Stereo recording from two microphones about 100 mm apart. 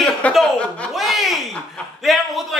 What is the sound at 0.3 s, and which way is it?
Chuckle, 10° left (ahead or behind).